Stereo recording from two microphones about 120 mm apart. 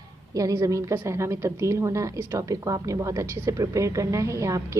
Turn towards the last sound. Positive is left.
turn(degrees=-25)  # may be behind; listen again after turning